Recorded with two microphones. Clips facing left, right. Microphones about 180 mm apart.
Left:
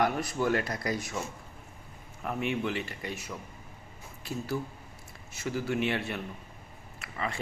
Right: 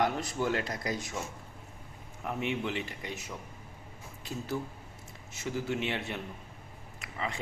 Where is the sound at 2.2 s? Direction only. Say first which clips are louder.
Left 2 dB; 20° right (ahead or behind).